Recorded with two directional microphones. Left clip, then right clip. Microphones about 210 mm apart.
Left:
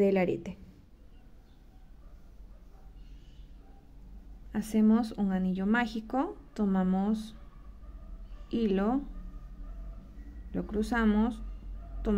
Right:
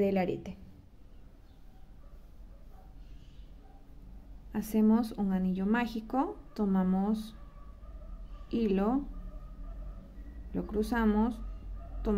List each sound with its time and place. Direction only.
0.0 s a woman's voice: 25° left (ahead or behind)
4.5 s speech: 10° left (ahead or behind)
8.5 s speech: 10° left (ahead or behind)
10.5 s speech: 10° left (ahead or behind)
12.0 s music: 10° left (ahead or behind)